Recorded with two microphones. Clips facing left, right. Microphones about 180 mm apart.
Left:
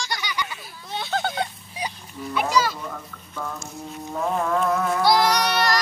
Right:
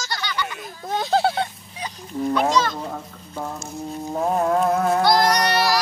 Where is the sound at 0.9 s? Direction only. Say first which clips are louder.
Right 7 dB; 40° right (ahead or behind).